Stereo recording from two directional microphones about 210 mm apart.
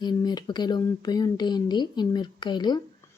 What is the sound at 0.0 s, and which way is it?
Speech, 20° left (ahead or behind).